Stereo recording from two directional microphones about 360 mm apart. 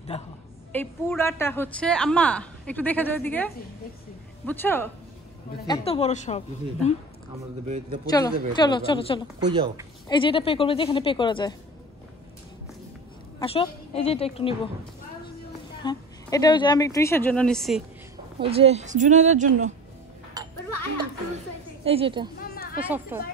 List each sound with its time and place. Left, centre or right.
0.1 s a woman's voice: centre
0.7 s a woman's voice: centre
5.7 s a woman's voice: centre
7.6 s a woman's voice: centre
8.1 s a woman's voice: centre
9.4 s a woman's voice: centre
10.0 s a woman's voice: centre
13.4 s a woman's voice: centre
15.8 s a woman's voice: centre
18.4 s a woman's voice: centre
21.8 s a woman's voice: centre